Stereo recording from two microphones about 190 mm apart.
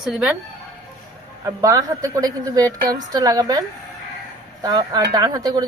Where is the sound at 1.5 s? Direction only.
15° right (ahead or behind).